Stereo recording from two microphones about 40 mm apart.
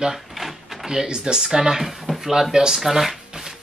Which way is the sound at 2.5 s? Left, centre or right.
Centre.